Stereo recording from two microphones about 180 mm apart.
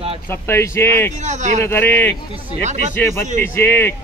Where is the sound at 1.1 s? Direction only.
40° right (ahead or behind).